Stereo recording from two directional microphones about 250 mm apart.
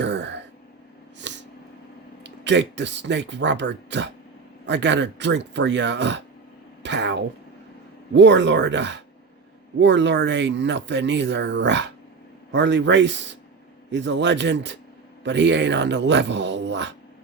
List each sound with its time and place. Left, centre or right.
0.0 s throat clearing: right
1.2 s a sound: right
2.2 s speech: right